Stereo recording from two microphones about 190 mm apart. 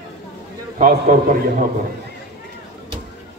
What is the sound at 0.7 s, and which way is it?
Speech, 45° right (ahead or behind).